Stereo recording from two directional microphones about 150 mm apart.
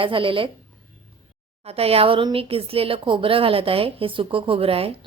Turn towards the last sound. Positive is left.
turn(degrees=-40)  # may be behind; listen again after turning